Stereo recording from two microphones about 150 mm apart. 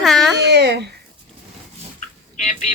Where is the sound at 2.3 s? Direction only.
50° left (ahead or behind).